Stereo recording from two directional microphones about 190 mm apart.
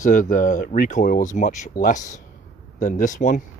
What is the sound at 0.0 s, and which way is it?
Speech, 40° left (ahead or behind).